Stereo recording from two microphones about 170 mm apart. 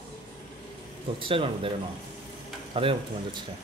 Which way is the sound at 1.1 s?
30° right (ahead or behind).